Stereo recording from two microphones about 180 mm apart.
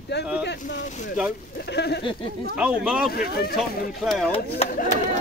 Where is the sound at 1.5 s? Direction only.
70° left (ahead or behind).